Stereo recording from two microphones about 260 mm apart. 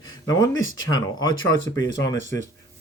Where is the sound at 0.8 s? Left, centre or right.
Centre.